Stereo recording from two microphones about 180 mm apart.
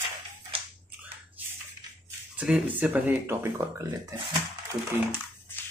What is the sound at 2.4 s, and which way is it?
Speech, 5° right (ahead or behind).